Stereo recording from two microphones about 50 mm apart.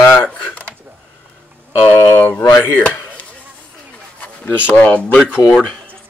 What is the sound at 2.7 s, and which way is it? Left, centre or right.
Chop, left.